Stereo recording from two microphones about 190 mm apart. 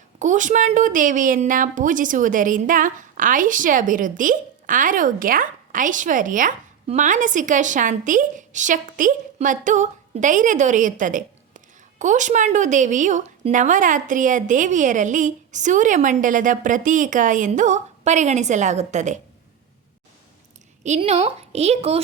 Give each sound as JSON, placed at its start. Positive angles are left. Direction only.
{"t": 0.2, "sound": "a woman's voice", "side_deg": -40}
{"t": 20.8, "sound": "a woman's voice", "side_deg": -35}